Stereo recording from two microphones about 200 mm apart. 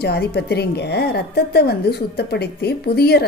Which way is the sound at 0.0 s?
55° left (ahead or behind).